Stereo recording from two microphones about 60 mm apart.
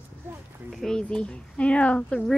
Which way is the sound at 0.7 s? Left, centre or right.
Centre.